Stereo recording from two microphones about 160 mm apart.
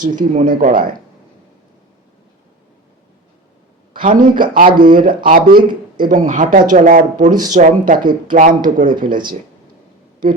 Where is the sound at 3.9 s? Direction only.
60° right (ahead or behind).